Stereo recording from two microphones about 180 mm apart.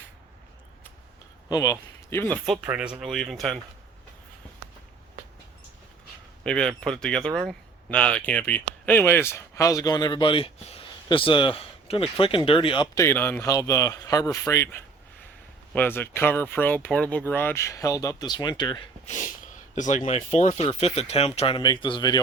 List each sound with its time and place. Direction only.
1.5 s speech: 20° left (ahead or behind)
2.6 s speech: 5° right (ahead or behind)
6.4 s speech: 5° left (ahead or behind); by 18.8 s 25° left (ahead or behind)
19.0 s speech: 45° left (ahead or behind); by 22.2 s 25° left (ahead or behind)